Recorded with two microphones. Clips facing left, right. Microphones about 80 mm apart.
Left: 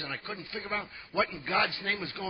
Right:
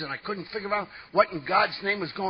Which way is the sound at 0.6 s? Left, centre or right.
Right.